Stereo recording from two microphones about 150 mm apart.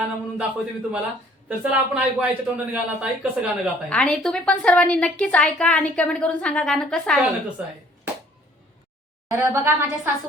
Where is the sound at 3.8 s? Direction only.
5° left (ahead or behind).